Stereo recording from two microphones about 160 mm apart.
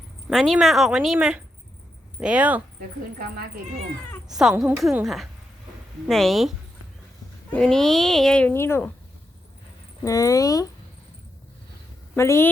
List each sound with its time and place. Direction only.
0.3 s a child's voice: centre (ahead or behind)
4.3 s a child's voice: 5° right (ahead or behind)
7.5 s a child's voice: 5° left (ahead or behind)
10.0 s speech: 20° left (ahead or behind)
12.1 s speech: 15° left (ahead or behind)